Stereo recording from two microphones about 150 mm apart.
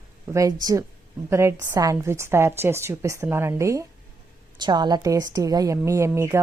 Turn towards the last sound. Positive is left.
turn(degrees=-15)  # may be behind; listen again after turning